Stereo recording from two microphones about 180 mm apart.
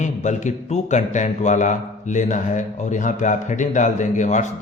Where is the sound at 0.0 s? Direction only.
40° left (ahead or behind).